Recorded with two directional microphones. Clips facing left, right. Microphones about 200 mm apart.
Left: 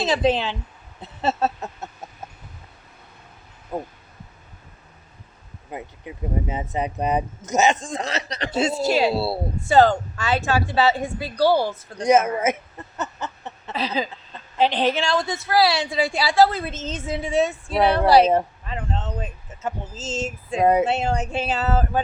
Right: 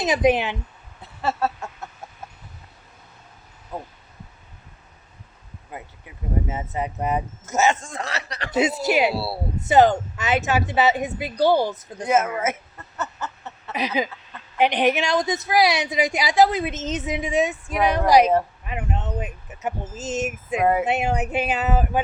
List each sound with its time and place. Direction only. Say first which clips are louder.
0.0 s a woman's voice: right 1 dB; 15° right (ahead or behind)
1.0 s speech: left 2 dB; 20° left (ahead or behind)
5.7 s speech: left 5 dB; 20° left (ahead or behind)
8.4 s a woman's voice: right 1 dB; 20° right (ahead or behind)
9.1 s speech: left 4 dB; 20° left (ahead or behind)
9.6 s a woman's voice: even; 20° right (ahead or behind)
12.0 s speech: left 3 dB; 15° left (ahead or behind)
13.0 s a sound: left 1 dB; 15° left (ahead or behind)
13.7 s a woman's voice: right 1 dB; 15° right (ahead or behind)
20.6 s speech: left 3 dB; 20° left (ahead or behind)
20.8 s a woman's voice: even; 15° right (ahead or behind)